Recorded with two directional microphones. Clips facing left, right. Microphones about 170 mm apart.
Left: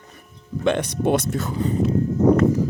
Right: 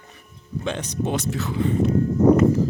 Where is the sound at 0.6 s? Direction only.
65° left (ahead or behind); by 1.7 s 40° left (ahead or behind).